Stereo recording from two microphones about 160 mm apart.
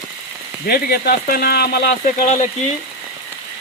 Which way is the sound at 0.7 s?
75° left (ahead or behind).